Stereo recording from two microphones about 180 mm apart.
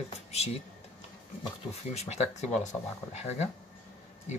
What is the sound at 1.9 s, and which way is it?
Speech, 35° left (ahead or behind).